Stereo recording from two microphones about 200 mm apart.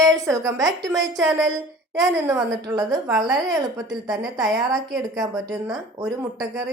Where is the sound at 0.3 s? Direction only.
15° right (ahead or behind).